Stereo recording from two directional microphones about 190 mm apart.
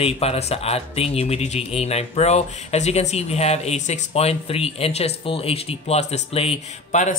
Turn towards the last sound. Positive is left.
turn(degrees=35)  # may be behind; listen again after turning